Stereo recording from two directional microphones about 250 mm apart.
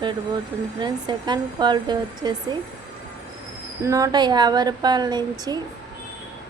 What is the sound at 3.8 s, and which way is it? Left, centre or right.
A woman's voice, centre.